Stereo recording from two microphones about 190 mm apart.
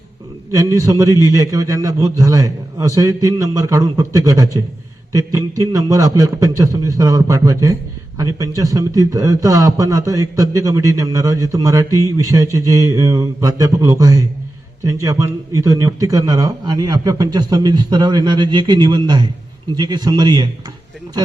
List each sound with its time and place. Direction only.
0.5 s a man's voice: 20° right (ahead or behind)